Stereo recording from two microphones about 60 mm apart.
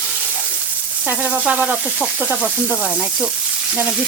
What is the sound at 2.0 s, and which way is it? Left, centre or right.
Speech, centre.